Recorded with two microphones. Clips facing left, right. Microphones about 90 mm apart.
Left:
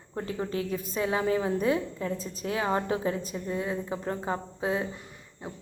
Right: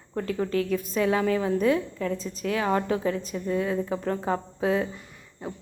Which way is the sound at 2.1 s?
40° left (ahead or behind).